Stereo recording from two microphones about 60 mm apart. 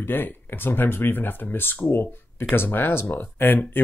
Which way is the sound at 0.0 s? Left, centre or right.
Left.